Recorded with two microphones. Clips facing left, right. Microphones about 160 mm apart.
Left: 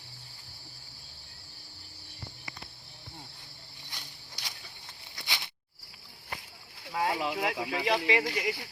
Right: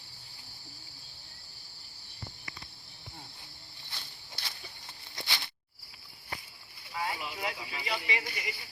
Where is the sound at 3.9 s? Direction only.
15° left (ahead or behind).